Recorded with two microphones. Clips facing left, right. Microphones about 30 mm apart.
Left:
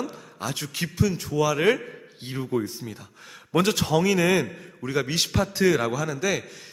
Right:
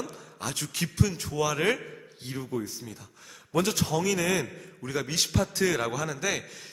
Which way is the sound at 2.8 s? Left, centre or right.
Centre.